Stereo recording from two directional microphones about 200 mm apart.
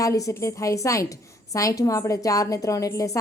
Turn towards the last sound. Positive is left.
turn(degrees=15)  # may be behind; listen again after turning